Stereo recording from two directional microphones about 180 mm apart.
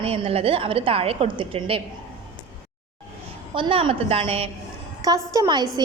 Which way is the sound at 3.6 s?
30° right (ahead or behind).